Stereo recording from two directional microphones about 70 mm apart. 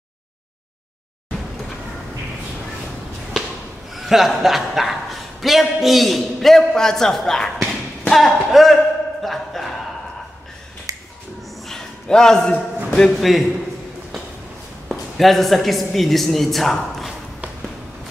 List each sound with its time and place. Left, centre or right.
3.9 s a man's voice: centre
9.2 s a sound: centre
10.9 s finger snapping: right
11.6 s a sound: centre
13.2 s a woman's voice: centre
14.9 s a woman's voice: centre